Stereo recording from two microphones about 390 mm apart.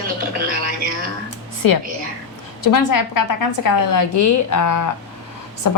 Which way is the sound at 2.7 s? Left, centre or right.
Left.